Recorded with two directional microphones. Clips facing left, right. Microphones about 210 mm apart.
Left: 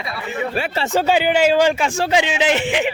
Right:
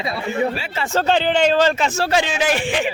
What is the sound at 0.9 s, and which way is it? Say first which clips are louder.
A man's voice: even; 10° left (ahead or behind).